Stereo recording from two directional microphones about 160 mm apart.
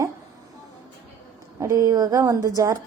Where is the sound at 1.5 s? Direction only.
20° right (ahead or behind).